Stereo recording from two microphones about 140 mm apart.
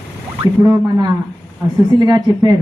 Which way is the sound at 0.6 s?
25° right (ahead or behind).